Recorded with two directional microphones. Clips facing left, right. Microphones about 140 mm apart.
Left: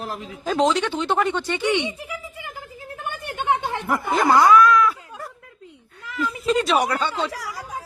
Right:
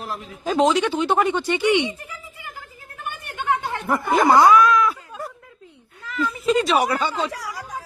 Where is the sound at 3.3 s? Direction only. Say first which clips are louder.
Left 1 dB; 25° left (ahead or behind).